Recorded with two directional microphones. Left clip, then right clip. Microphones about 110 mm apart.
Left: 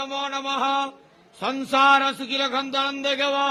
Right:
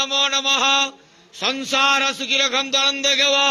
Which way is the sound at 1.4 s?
10° left (ahead or behind).